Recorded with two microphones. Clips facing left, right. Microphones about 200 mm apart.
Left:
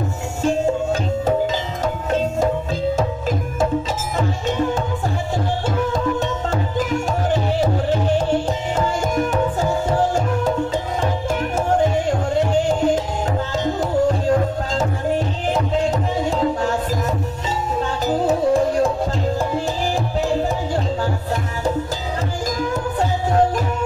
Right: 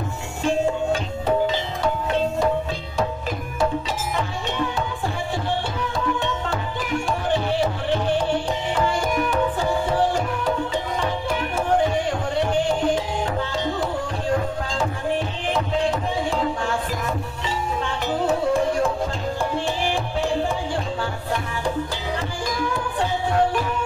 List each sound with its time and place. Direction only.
1.8 s music: 45° left (ahead or behind)
5.8 s music: 45° left (ahead or behind)
12.1 s music: 45° left (ahead or behind)
22.6 s music: 40° left (ahead or behind)